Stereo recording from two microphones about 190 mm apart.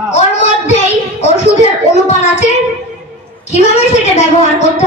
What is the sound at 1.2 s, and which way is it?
A woman's voice, 35° left (ahead or behind).